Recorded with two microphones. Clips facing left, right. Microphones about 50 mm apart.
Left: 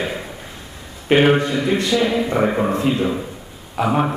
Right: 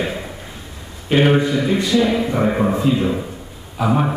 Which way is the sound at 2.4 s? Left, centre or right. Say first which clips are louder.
Right 2 dB; centre.